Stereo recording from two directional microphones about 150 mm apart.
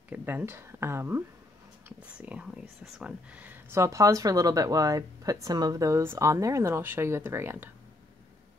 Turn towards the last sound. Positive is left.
turn(degrees=-15)  # may be behind; listen again after turning